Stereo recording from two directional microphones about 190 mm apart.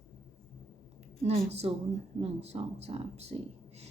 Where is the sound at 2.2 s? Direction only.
35° right (ahead or behind).